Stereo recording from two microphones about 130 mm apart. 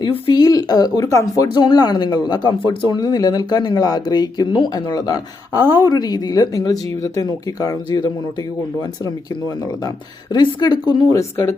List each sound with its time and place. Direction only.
0.0 s speech: 40° left (ahead or behind)
10.3 s speech: 35° left (ahead or behind)
11.1 s speech: 20° left (ahead or behind)